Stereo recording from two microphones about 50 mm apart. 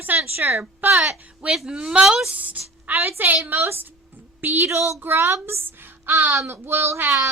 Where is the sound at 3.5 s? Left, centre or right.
Right.